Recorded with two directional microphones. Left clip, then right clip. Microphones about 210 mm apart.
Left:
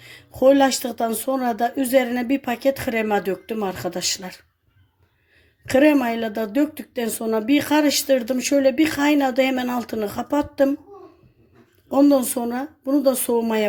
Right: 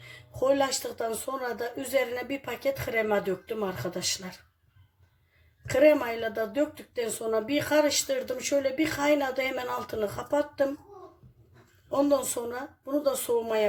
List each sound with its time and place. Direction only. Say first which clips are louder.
0.3 s speech: left 10 dB; 50° left (ahead or behind)
5.7 s speech: left 5 dB; 50° left (ahead or behind)
11.9 s speech: left 8 dB; 45° left (ahead or behind)